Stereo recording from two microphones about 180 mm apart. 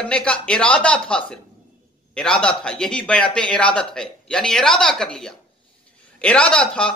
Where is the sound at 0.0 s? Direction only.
5° left (ahead or behind).